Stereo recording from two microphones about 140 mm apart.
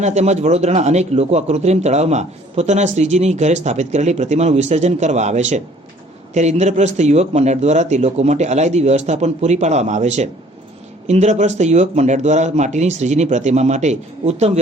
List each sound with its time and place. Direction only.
0.0 s a man's voice: 55° right (ahead or behind)